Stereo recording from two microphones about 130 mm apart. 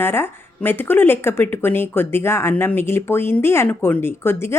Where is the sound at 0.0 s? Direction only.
15° left (ahead or behind).